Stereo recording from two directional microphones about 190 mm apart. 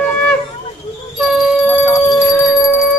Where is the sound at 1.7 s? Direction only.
10° right (ahead or behind).